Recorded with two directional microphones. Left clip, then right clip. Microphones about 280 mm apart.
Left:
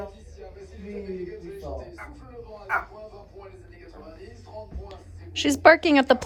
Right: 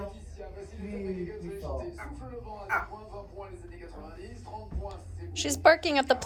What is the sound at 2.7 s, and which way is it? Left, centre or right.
Speech, centre.